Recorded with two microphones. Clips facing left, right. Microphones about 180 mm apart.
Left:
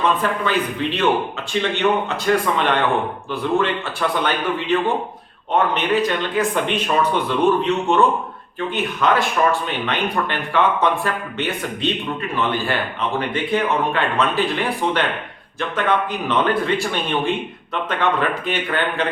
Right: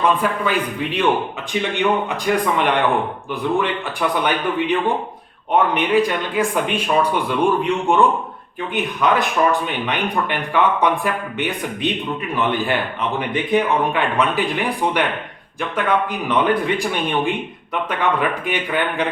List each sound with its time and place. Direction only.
0.0 s speech: 10° right (ahead or behind)
4.2 s speech: 15° right (ahead or behind)